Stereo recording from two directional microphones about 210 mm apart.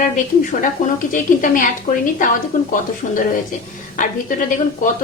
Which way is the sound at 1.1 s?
40° left (ahead or behind).